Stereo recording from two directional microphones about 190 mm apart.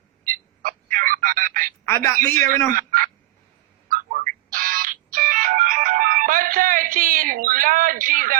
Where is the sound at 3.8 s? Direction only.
50° right (ahead or behind).